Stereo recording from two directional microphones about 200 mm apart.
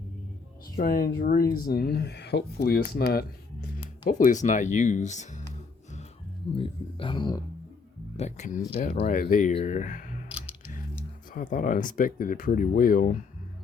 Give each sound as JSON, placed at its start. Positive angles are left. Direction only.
{"t": 0.8, "sound": "speech", "side_deg": 45}
{"t": 3.8, "sound": "speech", "side_deg": 40}
{"t": 6.6, "sound": "speech", "side_deg": 25}
{"t": 8.1, "sound": "speech", "side_deg": 35}
{"t": 11.3, "sound": "speech", "side_deg": 40}